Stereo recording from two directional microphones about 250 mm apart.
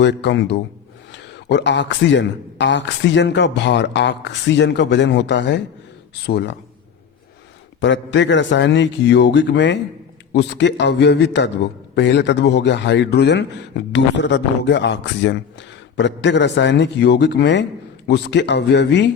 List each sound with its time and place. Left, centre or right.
0.0 s a man's voice: left
7.8 s a man's voice: left